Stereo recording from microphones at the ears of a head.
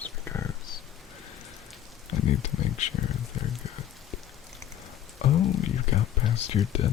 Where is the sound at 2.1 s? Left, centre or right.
Left.